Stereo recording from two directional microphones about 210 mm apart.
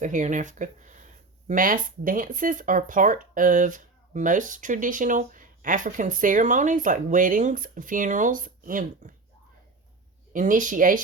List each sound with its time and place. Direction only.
0.0 s speech: 35° right (ahead or behind)
10.3 s speech: 40° right (ahead or behind)